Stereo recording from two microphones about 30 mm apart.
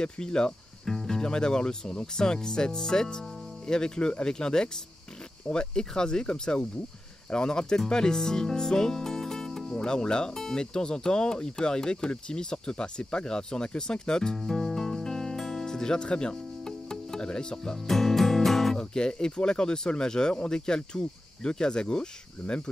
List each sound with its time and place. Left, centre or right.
0.0 s speech: left
0.8 s music: centre
1.2 s speech: left
10.3 s speech: centre
14.4 s speech: centre
15.0 s music: centre
16.1 s speech: left
16.6 s music: centre
17.3 s speech: left
17.8 s music: centre
18.8 s speech: left